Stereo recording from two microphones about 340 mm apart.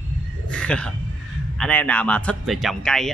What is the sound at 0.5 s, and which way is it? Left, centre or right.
Speech, centre.